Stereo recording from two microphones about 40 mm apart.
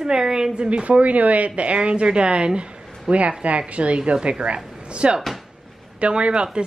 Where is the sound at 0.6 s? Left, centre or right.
Right.